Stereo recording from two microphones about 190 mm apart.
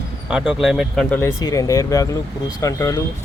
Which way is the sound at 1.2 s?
15° left (ahead or behind).